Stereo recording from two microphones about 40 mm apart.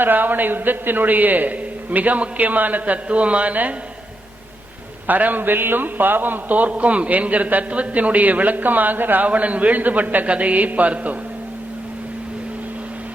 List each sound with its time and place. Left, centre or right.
0.0 s a man's voice: right
5.0 s a man's voice: right
9.2 s a man's voice: right